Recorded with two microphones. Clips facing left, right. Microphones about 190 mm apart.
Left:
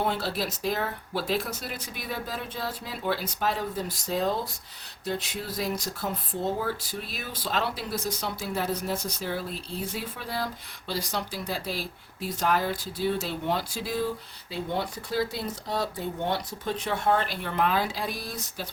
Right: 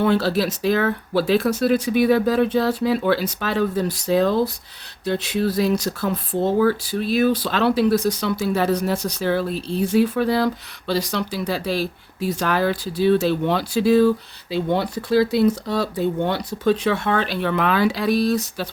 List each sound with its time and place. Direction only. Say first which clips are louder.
0.0 s speech: right 10 dB; 85° right